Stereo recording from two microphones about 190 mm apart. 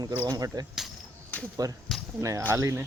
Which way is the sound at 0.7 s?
5° left (ahead or behind).